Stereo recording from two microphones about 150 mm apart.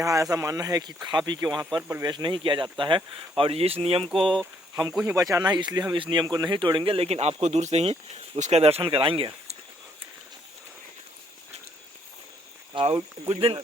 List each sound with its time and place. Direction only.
0.0 s speech: 20° right (ahead or behind); by 4.0 s 40° right (ahead or behind)
4.0 s speech: centre (ahead or behind)
5.0 s speech: 20° right (ahead or behind); by 9.6 s 35° right (ahead or behind)
12.7 s speech: 40° right (ahead or behind)